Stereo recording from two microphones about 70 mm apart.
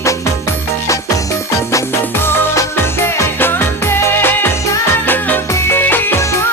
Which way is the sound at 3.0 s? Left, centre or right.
Left.